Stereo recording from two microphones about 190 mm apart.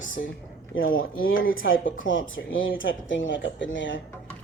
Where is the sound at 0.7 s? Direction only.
90° left.